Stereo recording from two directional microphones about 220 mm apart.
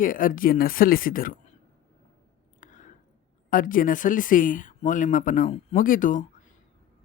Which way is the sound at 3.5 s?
40° left (ahead or behind).